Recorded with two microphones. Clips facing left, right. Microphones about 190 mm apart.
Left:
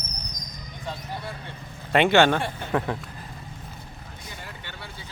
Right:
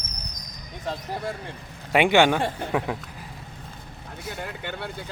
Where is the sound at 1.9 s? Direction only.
15° right (ahead or behind).